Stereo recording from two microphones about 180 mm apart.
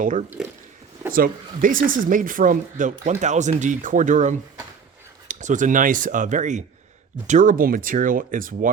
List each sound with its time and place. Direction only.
0.0 s speech: 45° right (ahead or behind)